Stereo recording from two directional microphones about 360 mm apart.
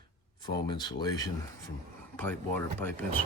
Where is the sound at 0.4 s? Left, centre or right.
Centre.